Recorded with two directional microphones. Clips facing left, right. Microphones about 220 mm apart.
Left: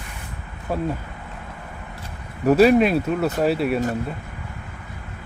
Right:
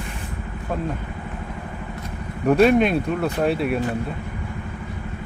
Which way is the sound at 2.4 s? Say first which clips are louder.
Left 1 dB; 5° left (ahead or behind).